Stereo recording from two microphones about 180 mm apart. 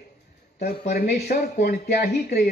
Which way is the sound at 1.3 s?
55° left (ahead or behind).